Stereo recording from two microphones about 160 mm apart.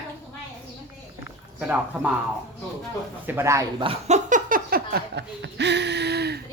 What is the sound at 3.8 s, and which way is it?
Speech, 40° right (ahead or behind).